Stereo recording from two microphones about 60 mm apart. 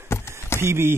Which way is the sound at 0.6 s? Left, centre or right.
Right.